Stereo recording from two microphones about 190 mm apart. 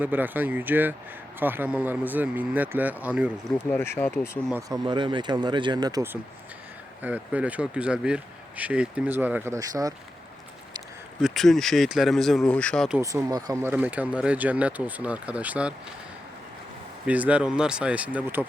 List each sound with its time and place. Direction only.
0.0 s speech: 10° right (ahead or behind)
3.7 s speech: 10° left (ahead or behind)
4.7 s speech: 25° right (ahead or behind)
7.0 s speech: 10° right (ahead or behind)
11.2 s speech: centre (ahead or behind)
13.0 s speech: 15° right (ahead or behind)
17.1 s speech: 5° right (ahead or behind)